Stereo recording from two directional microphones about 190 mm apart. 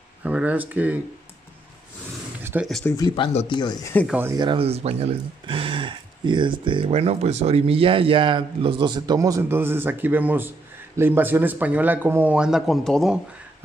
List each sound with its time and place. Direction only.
0.2 s speech: 5° right (ahead or behind)
2.4 s a sound: 10° right (ahead or behind)
3.3 s speech: 25° left (ahead or behind)
4.1 s speech: 10° right (ahead or behind)
4.4 s speech: 25° right (ahead or behind); by 13.7 s 5° right (ahead or behind)